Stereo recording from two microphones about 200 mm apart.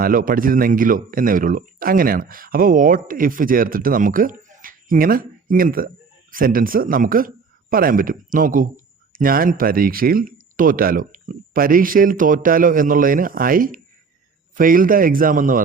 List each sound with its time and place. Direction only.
0.0 s a man's voice: 45° right (ahead or behind)